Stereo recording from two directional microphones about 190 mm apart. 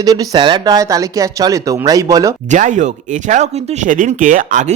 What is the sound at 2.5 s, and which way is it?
Speech, 40° right (ahead or behind).